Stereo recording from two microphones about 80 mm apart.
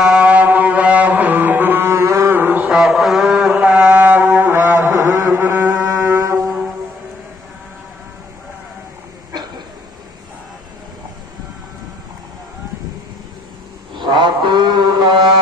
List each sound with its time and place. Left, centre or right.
0.0 s music: centre
2.7 s a sound: centre
3.4 s music: centre; by 5.4 s right
5.4 s music: right
5.7 s music: right
13.9 s a sound: right